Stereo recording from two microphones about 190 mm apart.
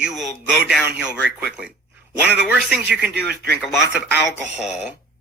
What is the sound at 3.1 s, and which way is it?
Speech, 60° right (ahead or behind).